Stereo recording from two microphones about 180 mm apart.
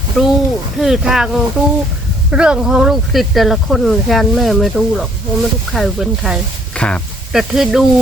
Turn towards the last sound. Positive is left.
turn(degrees=0)  # may be behind; listen again after turning